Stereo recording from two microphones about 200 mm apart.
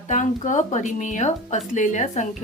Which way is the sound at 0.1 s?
40° left (ahead or behind).